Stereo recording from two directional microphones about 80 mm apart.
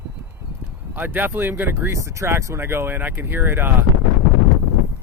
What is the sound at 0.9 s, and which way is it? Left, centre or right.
Speech, right.